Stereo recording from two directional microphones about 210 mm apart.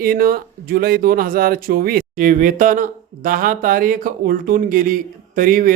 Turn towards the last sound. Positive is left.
turn(degrees=-40)  # may be behind; listen again after turning